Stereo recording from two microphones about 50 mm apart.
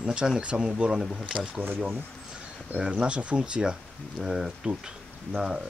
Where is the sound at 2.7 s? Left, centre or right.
Centre.